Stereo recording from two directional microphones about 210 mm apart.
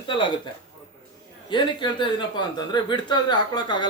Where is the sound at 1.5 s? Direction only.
20° left (ahead or behind).